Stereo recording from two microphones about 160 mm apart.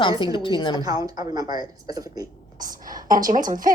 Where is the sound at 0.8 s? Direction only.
25° right (ahead or behind).